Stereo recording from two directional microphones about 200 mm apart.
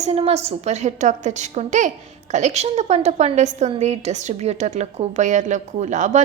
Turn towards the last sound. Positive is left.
turn(degrees=-40)  # may be behind; listen again after turning